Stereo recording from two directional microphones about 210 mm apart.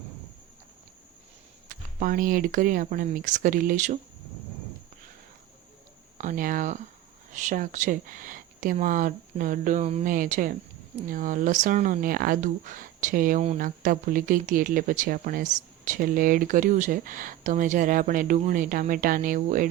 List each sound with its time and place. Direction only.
1.6 s speech: 40° right (ahead or behind)
6.1 s speech: 40° right (ahead or behind)